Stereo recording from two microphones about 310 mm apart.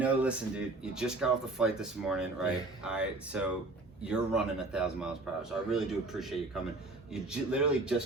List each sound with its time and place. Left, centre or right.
0.0 s speech: centre